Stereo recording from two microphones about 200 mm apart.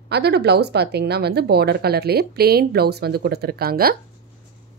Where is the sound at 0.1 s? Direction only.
55° right (ahead or behind).